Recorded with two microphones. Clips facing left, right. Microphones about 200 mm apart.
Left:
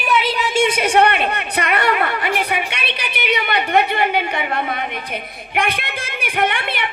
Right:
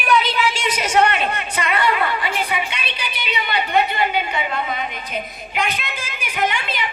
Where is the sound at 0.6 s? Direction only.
55° left (ahead or behind).